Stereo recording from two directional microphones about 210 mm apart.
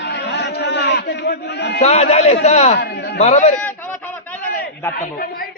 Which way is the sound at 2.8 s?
50° left (ahead or behind).